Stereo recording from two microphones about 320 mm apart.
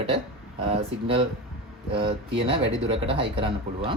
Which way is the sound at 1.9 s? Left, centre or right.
Centre.